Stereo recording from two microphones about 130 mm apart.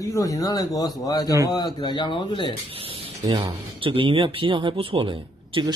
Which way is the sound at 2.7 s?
45° right (ahead or behind).